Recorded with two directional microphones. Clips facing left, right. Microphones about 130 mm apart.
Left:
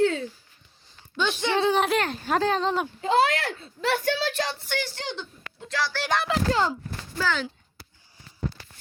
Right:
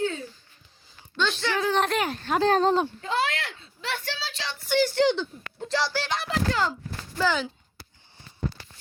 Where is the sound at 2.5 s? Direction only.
40° right (ahead or behind).